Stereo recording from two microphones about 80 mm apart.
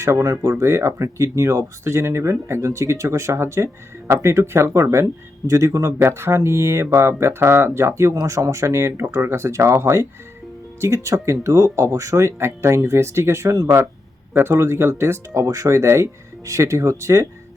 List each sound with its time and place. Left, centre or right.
0.0 s speech: right